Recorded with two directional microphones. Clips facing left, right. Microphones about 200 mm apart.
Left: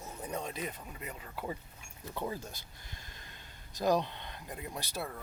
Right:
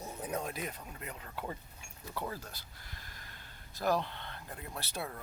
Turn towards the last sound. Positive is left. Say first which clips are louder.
# left 2 dB
turn(degrees=15)  # may be behind; listen again after turning